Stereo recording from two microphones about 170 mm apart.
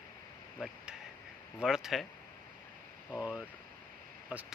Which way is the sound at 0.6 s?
5° right (ahead or behind).